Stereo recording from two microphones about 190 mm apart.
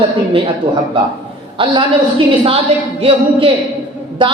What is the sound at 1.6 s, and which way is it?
A woman's voice, 25° right (ahead or behind).